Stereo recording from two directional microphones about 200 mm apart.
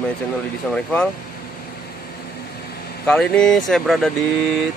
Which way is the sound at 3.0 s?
5° left (ahead or behind).